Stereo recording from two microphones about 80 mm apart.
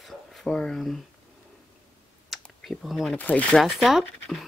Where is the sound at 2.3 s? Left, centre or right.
Centre.